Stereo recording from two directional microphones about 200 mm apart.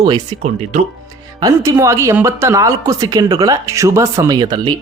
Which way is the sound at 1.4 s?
20° right (ahead or behind).